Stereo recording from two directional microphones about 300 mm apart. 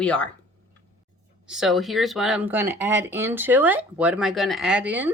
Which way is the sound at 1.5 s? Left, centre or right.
Centre.